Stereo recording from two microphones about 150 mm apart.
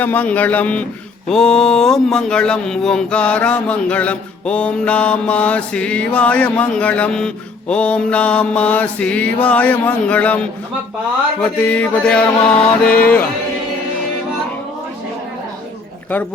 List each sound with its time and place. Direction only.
0.0 s speech: 10° left (ahead or behind)